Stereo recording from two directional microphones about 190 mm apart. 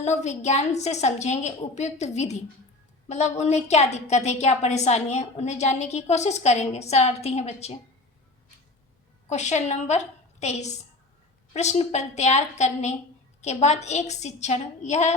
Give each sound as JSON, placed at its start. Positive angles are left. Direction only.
{"t": 0.0, "sound": "a woman's voice", "side_deg": 35}
{"t": 9.3, "sound": "a woman's voice", "side_deg": 40}